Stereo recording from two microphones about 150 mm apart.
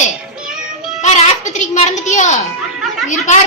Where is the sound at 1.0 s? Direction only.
55° left (ahead or behind).